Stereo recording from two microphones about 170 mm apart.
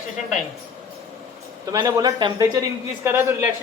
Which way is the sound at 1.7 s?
20° right (ahead or behind).